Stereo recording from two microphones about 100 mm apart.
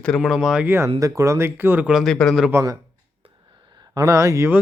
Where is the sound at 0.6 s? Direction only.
25° right (ahead or behind).